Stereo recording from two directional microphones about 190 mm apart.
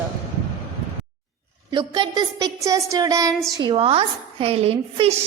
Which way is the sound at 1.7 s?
25° right (ahead or behind).